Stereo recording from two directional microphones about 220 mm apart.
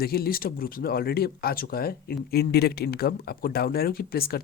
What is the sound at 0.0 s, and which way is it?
Speech, 45° left (ahead or behind).